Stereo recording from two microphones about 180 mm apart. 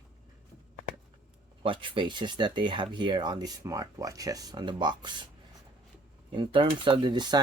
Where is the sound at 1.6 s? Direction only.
30° right (ahead or behind).